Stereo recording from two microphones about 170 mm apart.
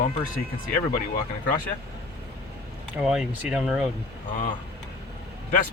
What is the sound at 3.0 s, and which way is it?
Speech, 5° right (ahead or behind).